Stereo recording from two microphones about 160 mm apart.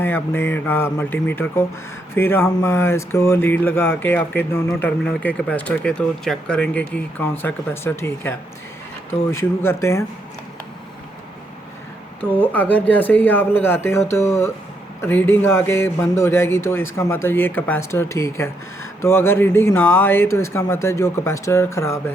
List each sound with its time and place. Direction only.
0.0 s speech: 15° left (ahead or behind)
12.2 s speech: 10° left (ahead or behind)